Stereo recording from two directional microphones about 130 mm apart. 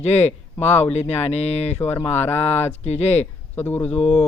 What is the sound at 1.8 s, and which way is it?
Speech, 15° left (ahead or behind).